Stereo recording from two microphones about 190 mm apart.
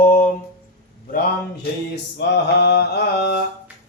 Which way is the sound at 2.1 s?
60° left (ahead or behind).